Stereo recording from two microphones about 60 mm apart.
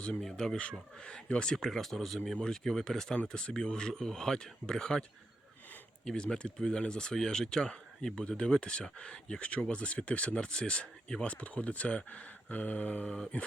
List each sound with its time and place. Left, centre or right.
0.2 s speech: centre
6.1 s speech: centre